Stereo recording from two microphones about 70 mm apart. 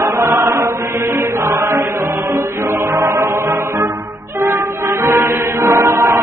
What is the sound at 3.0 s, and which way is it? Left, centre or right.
Chant, right.